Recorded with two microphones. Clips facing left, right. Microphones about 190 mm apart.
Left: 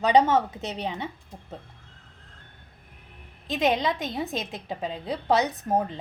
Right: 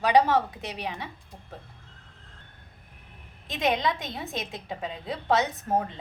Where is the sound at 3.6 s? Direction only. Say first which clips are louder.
Left 1 dB; 20° left (ahead or behind).